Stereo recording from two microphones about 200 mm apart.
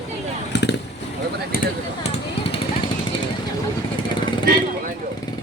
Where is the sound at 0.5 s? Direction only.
60° left (ahead or behind).